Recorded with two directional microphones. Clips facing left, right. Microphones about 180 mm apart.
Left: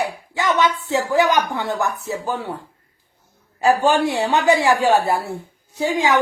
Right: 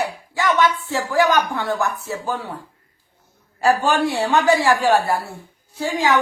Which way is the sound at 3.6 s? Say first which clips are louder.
Left 1 dB; 20° left (ahead or behind).